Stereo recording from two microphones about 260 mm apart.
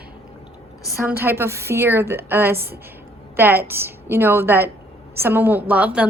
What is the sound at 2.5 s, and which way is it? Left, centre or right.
Speech, right.